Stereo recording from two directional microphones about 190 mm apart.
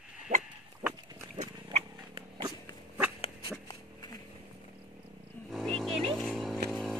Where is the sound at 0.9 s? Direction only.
20° right (ahead or behind).